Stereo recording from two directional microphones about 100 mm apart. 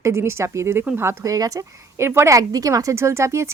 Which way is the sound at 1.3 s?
35° right (ahead or behind).